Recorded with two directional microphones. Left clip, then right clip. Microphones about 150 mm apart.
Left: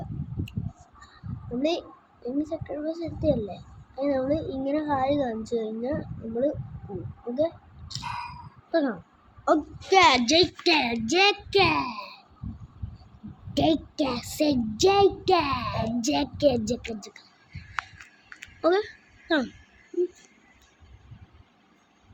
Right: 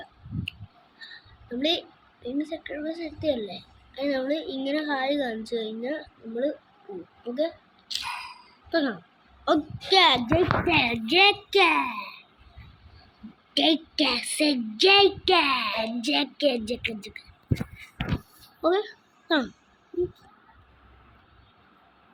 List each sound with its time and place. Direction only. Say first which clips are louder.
1.5 s a woman's voice: right 1 dB; 5° left (ahead or behind)
7.3 s a sound: left 2 dB; 5° right (ahead or behind)
8.7 s a woman's voice: left 1 dB; 5° right (ahead or behind)
10.2 s a woman's voice: left 2 dB; 20° left (ahead or behind)
11.5 s a woman's voice: right 1 dB; centre (ahead or behind)
13.5 s a woman's voice: right 1 dB; 5° left (ahead or behind)
18.6 s a sound: left 1 dB; 10° left (ahead or behind)